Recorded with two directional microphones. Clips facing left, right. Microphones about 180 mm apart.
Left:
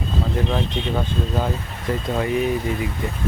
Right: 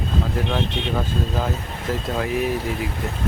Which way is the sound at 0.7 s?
65° right (ahead or behind).